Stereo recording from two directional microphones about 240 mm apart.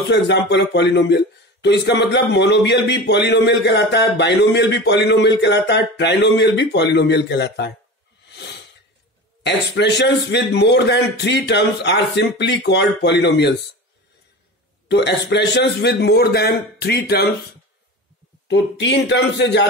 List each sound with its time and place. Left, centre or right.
0.1 s a man's voice: left
8.3 s a sound: left
9.4 s a man's voice: left
14.9 s a man's voice: left
18.5 s a man's voice: left